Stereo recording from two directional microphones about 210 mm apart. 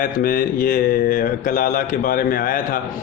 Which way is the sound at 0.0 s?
40° left (ahead or behind).